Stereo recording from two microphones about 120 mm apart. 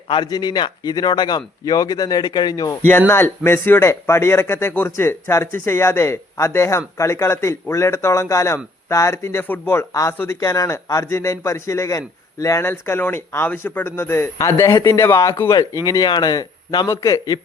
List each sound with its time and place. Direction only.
0.1 s speech: 35° left (ahead or behind)
3.1 s a man's voice: 20° left (ahead or behind)